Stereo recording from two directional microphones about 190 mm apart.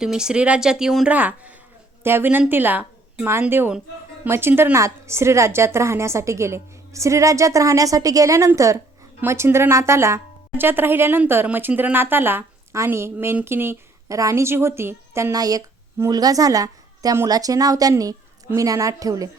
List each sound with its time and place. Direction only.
0.0 s speech: 5° right (ahead or behind)